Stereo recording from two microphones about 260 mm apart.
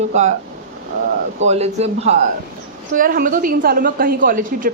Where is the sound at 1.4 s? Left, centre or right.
Right.